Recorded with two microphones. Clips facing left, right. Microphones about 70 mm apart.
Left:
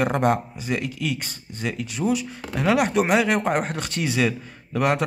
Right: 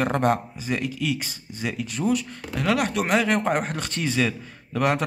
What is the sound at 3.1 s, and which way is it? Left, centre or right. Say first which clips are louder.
Speech: left 1 dB; centre.